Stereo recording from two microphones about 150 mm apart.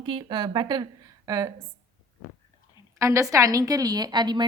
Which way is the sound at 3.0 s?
20° right (ahead or behind).